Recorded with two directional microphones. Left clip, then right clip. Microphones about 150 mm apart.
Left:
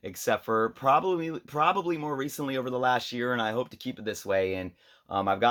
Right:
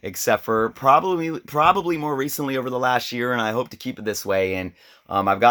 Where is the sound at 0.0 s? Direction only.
40° right (ahead or behind).